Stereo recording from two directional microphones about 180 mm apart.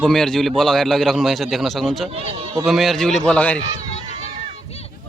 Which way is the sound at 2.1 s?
35° right (ahead or behind).